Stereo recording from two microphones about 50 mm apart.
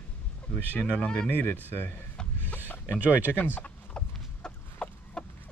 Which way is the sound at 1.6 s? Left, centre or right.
Left.